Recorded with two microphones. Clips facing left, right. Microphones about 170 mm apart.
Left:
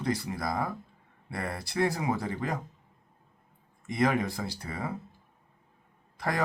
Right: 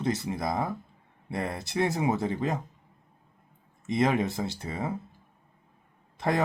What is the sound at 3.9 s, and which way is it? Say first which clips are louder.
Speech: right 2 dB; 25° right (ahead or behind).